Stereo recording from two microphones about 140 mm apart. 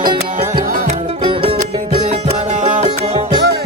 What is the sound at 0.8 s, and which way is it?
Music, 45° right (ahead or behind).